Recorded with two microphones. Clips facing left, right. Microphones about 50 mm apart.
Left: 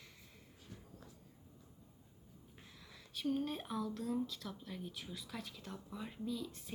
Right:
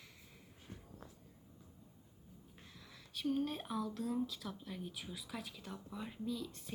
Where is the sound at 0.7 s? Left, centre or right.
Right.